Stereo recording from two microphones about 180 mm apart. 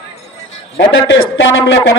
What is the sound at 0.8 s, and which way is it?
Speech, 85° left.